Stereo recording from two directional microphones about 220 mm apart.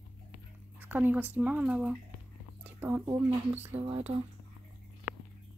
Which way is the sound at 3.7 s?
25° right (ahead or behind).